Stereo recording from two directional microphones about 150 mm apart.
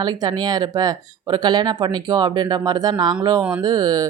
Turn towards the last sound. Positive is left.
turn(degrees=-25)  # may be behind; listen again after turning